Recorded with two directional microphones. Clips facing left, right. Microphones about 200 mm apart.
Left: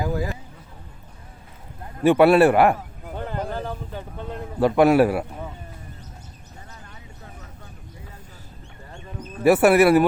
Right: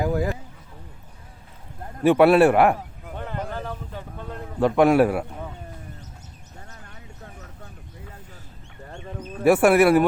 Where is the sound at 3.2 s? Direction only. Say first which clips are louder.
Left 3 dB; 35° left (ahead or behind).